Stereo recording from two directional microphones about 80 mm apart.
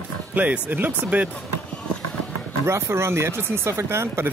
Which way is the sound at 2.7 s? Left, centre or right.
Right.